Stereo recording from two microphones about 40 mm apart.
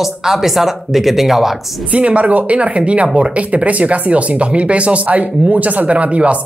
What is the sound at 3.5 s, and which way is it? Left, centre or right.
Speech, right.